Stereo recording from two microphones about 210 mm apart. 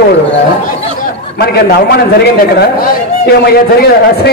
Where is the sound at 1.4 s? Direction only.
50° left (ahead or behind).